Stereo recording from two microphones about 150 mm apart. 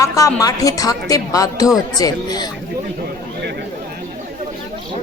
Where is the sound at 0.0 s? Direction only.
20° left (ahead or behind).